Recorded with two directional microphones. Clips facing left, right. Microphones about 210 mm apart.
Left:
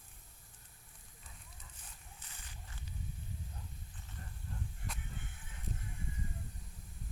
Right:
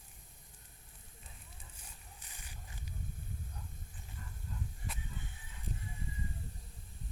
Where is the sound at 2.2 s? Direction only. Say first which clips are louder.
Right 1 dB; 15° right (ahead or behind).